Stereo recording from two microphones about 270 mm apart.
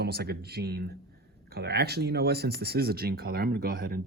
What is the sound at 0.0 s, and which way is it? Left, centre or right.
Speech, right.